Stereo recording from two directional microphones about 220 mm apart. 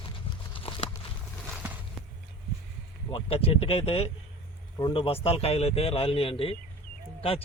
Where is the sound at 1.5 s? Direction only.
5° right (ahead or behind).